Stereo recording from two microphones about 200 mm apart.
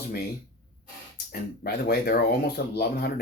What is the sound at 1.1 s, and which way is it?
Speech, 50° left (ahead or behind).